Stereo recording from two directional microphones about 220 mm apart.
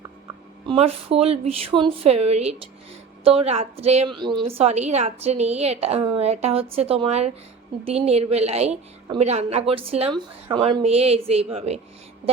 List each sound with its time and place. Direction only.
0.7 s a woman's voice: 25° right (ahead or behind)